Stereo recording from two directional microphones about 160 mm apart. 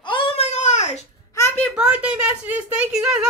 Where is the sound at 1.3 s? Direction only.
15° left (ahead or behind).